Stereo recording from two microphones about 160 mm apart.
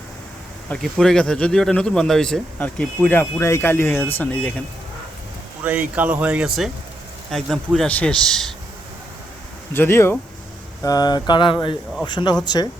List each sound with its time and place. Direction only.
0.7 s speech: centre (ahead or behind)
5.6 s a man's voice: 5° right (ahead or behind)
9.7 s speech: 15° left (ahead or behind)
10.8 s speech: 25° left (ahead or behind)